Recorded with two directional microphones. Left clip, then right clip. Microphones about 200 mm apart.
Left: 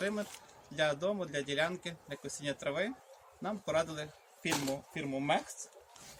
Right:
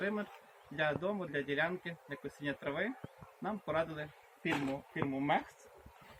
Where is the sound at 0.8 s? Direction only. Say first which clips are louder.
Left 3 dB; 20° left (ahead or behind).